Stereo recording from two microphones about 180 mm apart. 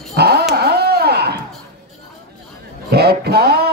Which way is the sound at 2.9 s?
60° right (ahead or behind).